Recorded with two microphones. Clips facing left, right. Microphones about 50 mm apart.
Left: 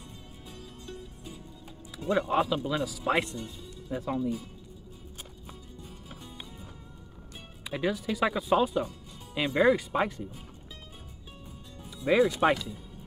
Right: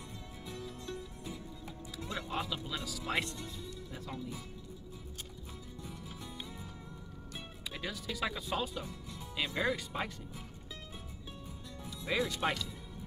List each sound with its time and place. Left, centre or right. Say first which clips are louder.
2.0 s speech: left 12 dB; left
7.7 s speech: left 11 dB; left
9.8 s speech: left 10 dB; left
12.0 s speech: left 10 dB; left